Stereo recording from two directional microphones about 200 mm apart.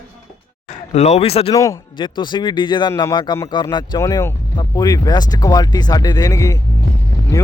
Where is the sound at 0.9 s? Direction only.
35° left (ahead or behind).